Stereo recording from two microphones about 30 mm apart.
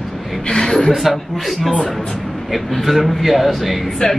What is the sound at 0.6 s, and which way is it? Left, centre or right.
Speech, centre.